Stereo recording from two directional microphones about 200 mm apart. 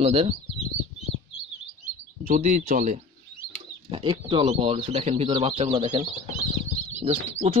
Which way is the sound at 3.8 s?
25° right (ahead or behind).